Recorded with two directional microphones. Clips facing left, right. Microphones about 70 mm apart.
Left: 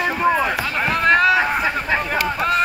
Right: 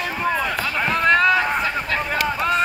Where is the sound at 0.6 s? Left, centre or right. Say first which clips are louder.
Left 1 dB; centre.